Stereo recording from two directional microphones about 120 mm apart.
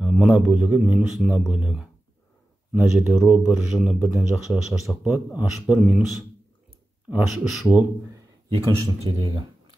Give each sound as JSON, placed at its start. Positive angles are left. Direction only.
{"t": 0.0, "sound": "a man's voice", "side_deg": -10}
{"t": 7.2, "sound": "speech", "side_deg": 0}
{"t": 8.1, "sound": "a sound", "side_deg": -25}
{"t": 9.1, "sound": "speech", "side_deg": -40}